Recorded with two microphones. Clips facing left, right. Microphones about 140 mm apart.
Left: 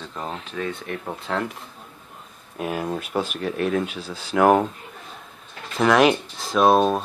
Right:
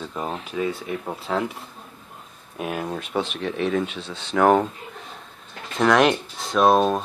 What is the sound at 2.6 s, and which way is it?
Speech, centre (ahead or behind).